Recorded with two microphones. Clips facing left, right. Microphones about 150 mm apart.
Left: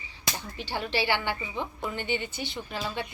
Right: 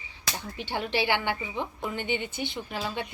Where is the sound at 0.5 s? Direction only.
15° right (ahead or behind).